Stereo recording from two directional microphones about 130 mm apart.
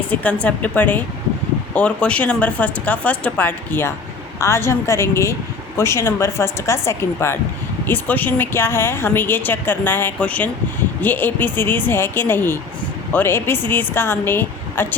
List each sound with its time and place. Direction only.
0.1 s a woman's voice: 10° left (ahead or behind)